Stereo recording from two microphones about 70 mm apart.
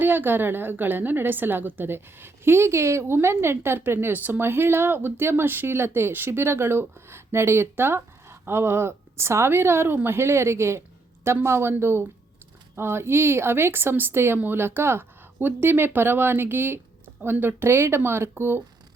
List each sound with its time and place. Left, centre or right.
0.0 s a woman's voice: right